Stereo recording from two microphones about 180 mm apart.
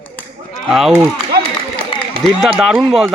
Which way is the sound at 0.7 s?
Centre (ahead or behind).